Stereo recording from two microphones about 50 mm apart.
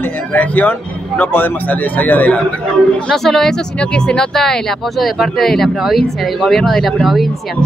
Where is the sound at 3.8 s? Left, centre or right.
Centre.